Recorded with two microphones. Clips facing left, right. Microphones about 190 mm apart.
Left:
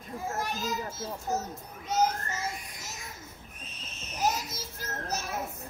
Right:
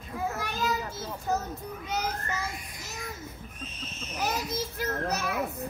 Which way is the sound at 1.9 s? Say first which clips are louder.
Left 5 dB; 65° right (ahead or behind).